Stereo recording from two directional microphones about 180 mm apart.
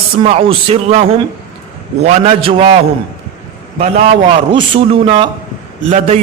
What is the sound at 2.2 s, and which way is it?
Speech, 30° right (ahead or behind).